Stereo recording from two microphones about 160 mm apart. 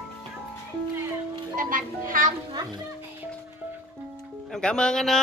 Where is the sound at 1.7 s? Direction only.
60° right (ahead or behind).